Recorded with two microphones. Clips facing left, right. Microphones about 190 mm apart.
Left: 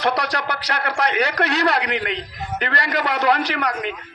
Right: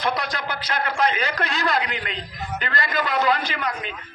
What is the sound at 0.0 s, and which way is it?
A man's voice, 70° left (ahead or behind).